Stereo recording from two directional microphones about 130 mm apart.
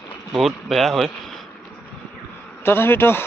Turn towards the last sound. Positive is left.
turn(degrees=15)  # may be behind; listen again after turning